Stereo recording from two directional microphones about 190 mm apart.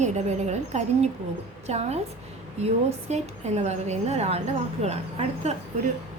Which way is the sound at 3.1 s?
35° right (ahead or behind).